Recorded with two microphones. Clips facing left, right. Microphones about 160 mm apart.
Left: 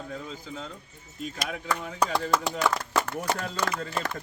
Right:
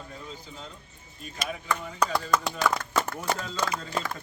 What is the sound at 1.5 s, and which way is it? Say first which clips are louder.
Chopping: right 2 dB; 65° left (ahead or behind).